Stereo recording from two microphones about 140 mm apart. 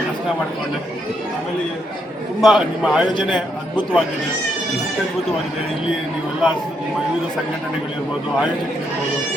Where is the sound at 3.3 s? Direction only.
35° left (ahead or behind).